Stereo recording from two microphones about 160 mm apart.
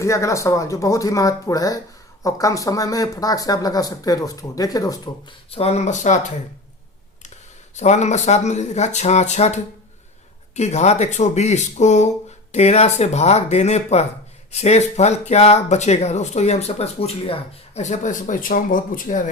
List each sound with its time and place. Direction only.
0.0 s speech: 20° left (ahead or behind)
5.5 s speech: 40° left (ahead or behind)
7.8 s speech: 45° left (ahead or behind)